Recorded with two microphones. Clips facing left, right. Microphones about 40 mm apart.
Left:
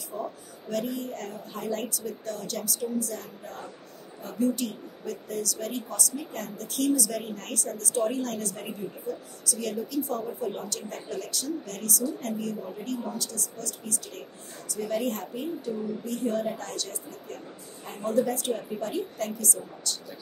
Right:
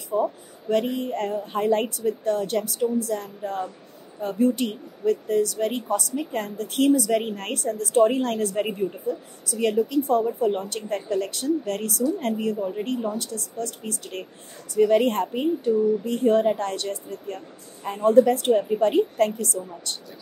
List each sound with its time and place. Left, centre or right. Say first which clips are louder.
0.1 s a woman's voice: right 11 dB; right